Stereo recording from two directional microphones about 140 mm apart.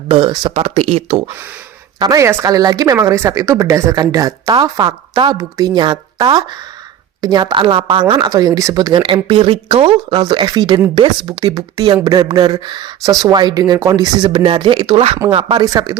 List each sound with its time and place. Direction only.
0.1 s speech: 35° right (ahead or behind)
2.0 s speech: 25° right (ahead or behind)
8.3 s speech: 25° right (ahead or behind)
9.0 s speech: 40° right (ahead or behind)